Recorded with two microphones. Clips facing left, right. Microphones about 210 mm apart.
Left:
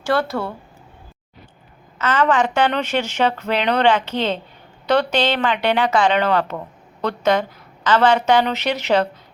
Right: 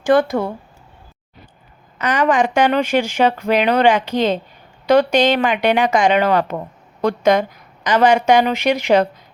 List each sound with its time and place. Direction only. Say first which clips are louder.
0.0 s speech: right 6 dB; 15° right (ahead or behind)
2.0 s speech: right 2 dB; 15° right (ahead or behind)